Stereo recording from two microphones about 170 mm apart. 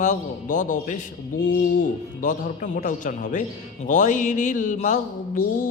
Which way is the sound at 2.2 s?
50° left (ahead or behind).